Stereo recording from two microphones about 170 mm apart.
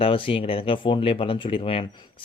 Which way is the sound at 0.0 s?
30° left (ahead or behind).